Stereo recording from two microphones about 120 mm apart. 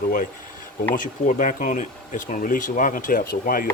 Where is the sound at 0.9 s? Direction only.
90° left.